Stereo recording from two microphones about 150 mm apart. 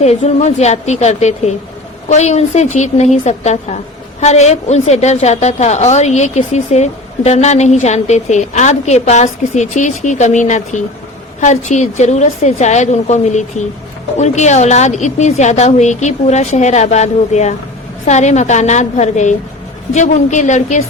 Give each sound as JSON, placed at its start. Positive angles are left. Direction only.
{"t": 0.0, "sound": "a woman's voice", "side_deg": 45}